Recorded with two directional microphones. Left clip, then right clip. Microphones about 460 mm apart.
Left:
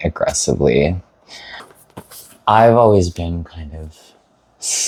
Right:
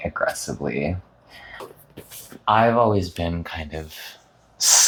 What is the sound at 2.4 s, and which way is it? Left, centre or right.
Speech, left.